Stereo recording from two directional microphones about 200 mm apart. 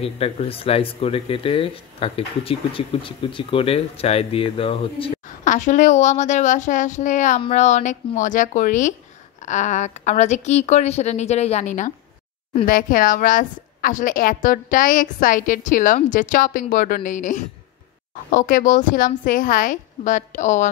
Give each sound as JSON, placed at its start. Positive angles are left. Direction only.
{"t": 0.0, "sound": "speech", "side_deg": 30}
{"t": 5.4, "sound": "a woman's voice", "side_deg": 40}